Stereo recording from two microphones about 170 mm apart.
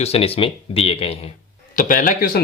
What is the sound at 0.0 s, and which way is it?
Speech, 35° left (ahead or behind).